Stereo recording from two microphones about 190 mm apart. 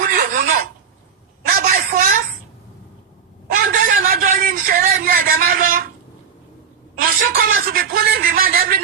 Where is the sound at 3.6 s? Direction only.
45° right (ahead or behind).